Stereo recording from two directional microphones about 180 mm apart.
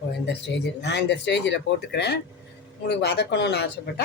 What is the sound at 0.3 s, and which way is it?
Speech, 70° left (ahead or behind).